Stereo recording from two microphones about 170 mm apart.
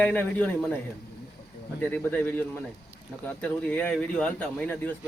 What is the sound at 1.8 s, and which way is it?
Speech, 10° left (ahead or behind).